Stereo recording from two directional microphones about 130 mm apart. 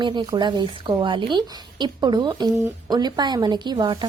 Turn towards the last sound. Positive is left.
turn(degrees=-35)  # may be behind; listen again after turning